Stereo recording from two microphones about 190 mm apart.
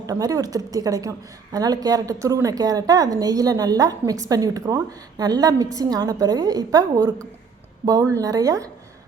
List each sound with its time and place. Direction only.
0.0 s a woman's voice: 20° right (ahead or behind)